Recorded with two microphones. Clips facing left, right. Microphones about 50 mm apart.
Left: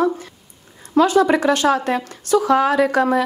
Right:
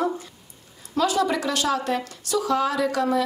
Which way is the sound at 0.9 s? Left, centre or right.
Left.